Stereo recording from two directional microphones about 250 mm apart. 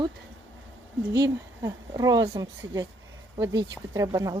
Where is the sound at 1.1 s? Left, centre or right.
Centre.